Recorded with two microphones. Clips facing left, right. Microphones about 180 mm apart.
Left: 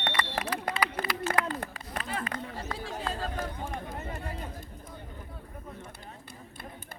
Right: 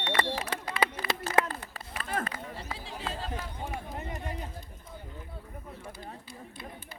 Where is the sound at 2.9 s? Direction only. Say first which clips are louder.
Left 1 dB; 45° left (ahead or behind).